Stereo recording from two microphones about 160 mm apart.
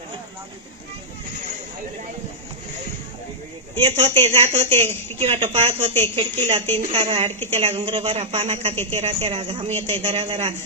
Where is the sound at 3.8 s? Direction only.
40° right (ahead or behind).